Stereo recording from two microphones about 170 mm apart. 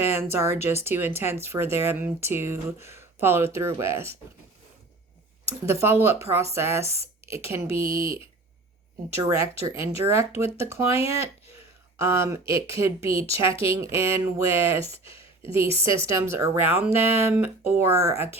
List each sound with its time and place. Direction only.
0.2 s speech: 15° right (ahead or behind)
5.6 s speech: 15° right (ahead or behind)
11.9 s speech: 15° right (ahead or behind)
15.1 s a sound: 30° left (ahead or behind)
15.5 s speech: 15° right (ahead or behind)